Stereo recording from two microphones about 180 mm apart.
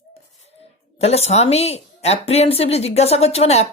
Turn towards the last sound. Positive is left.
turn(degrees=35)  # may be behind; listen again after turning